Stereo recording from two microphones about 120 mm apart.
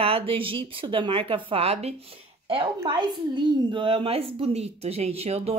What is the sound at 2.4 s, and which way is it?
A woman's voice, 45° right (ahead or behind).